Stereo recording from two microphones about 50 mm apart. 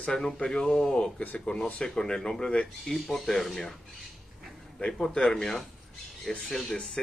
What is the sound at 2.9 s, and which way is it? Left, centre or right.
Speech, centre.